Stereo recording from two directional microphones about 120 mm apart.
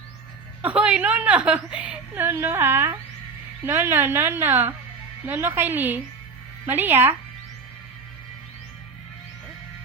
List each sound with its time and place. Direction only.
0.6 s a woman's voice: 10° right (ahead or behind)